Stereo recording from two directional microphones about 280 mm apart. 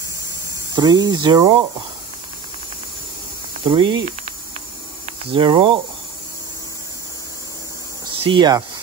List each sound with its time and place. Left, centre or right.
0.7 s speech: centre
3.6 s speech: centre
5.0 s cricket: centre
8.0 s a sound: centre